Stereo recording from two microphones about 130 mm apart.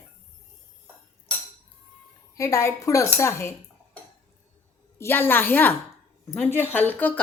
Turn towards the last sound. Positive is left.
turn(degrees=15)  # may be behind; listen again after turning